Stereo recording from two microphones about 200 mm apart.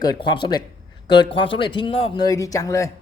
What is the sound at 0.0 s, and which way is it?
A man's voice, 20° left (ahead or behind).